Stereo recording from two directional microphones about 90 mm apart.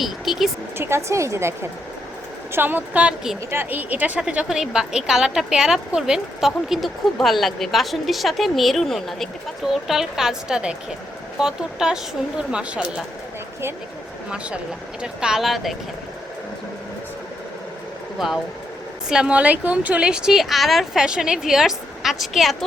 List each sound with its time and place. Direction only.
0.0 s a woman's voice: centre (ahead or behind)
0.8 s a woman's voice: 30° right (ahead or behind); by 12.9 s 10° right (ahead or behind)
14.3 s a woman's voice: 10° right (ahead or behind)
19.1 s a woman's voice: 10° right (ahead or behind)